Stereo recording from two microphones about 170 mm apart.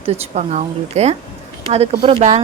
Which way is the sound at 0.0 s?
35° right (ahead or behind).